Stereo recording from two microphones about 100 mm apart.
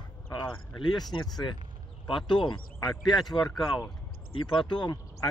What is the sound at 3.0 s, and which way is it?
Speech, centre (ahead or behind).